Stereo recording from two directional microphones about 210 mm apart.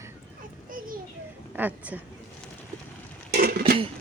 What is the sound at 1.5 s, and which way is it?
Speech, 10° right (ahead or behind).